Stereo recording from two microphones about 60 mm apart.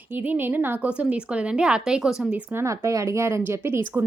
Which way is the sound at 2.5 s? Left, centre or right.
Right.